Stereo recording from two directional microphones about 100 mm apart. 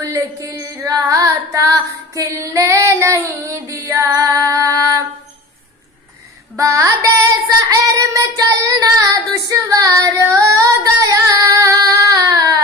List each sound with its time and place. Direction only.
0.0 s carnatic music: 35° right (ahead or behind)
6.5 s carnatic music: 30° right (ahead or behind)
9.5 s female singing: 35° right (ahead or behind)